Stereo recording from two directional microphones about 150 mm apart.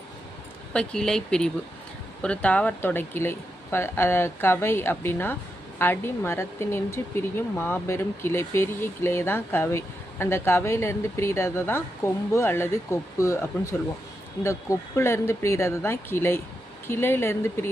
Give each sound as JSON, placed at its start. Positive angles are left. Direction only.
{"t": 0.7, "sound": "speech", "side_deg": 5}